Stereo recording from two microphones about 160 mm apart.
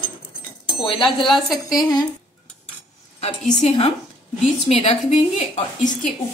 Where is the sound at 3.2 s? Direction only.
45° left (ahead or behind).